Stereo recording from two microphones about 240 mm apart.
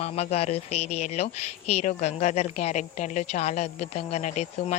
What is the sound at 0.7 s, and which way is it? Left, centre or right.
Speech, left.